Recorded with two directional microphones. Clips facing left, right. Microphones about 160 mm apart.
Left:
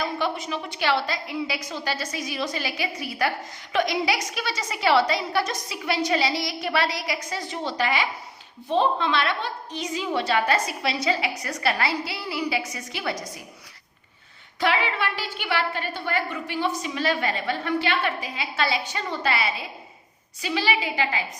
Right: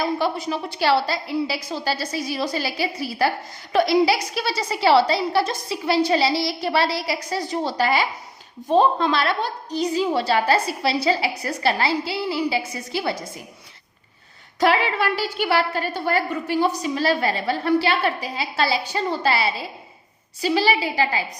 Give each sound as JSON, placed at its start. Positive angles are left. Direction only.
{"t": 0.0, "sound": "a woman's voice", "side_deg": -35}
{"t": 14.6, "sound": "a woman's voice", "side_deg": -40}